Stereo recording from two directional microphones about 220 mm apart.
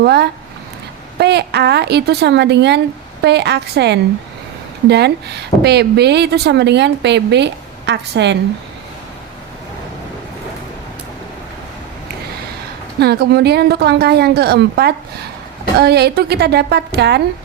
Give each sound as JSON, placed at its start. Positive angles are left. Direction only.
{"t": 0.0, "sound": "a woman's voice", "side_deg": -50}
{"t": 13.0, "sound": "a woman's voice", "side_deg": -45}